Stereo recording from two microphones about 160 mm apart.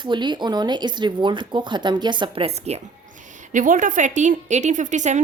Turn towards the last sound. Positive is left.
turn(degrees=-50)  # may be behind; listen again after turning